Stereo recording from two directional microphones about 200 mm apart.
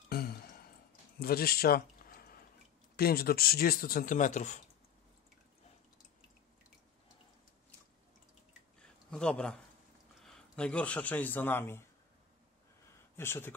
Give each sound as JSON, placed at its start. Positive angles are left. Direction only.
{"t": 0.1, "sound": "a sound", "side_deg": 50}
{"t": 1.2, "sound": "speech", "side_deg": 50}
{"t": 3.0, "sound": "speech", "side_deg": 50}
{"t": 8.7, "sound": "a sound", "side_deg": 5}
{"t": 10.2, "sound": "speech", "side_deg": 5}
{"t": 13.1, "sound": "speech", "side_deg": 10}